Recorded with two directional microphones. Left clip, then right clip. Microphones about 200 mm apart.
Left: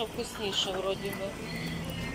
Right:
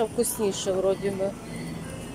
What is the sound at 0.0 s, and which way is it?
Speech, 30° right (ahead or behind).